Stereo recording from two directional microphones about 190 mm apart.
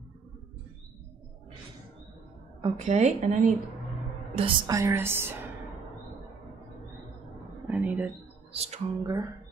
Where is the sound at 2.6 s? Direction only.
35° right (ahead or behind).